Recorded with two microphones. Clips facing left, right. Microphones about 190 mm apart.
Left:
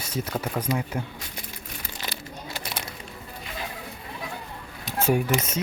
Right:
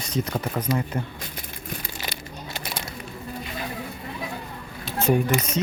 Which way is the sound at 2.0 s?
15° right (ahead or behind).